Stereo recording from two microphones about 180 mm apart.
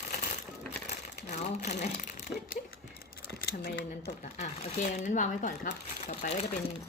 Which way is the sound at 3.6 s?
65° left (ahead or behind).